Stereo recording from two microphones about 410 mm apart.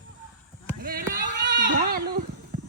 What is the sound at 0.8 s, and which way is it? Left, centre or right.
Speech, right.